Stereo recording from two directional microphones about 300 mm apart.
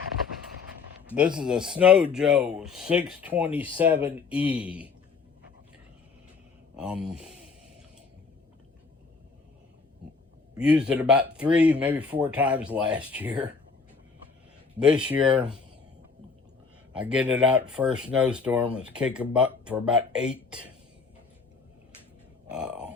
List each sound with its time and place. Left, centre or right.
1.4 s speech: centre
3.4 s speech: centre
4.0 s speech: centre
6.7 s speech: centre
10.6 s speech: centre
14.8 s speech: centre
16.9 s speech: centre
22.4 s speech: centre